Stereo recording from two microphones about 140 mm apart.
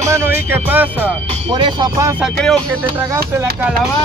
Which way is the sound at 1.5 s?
30° right (ahead or behind).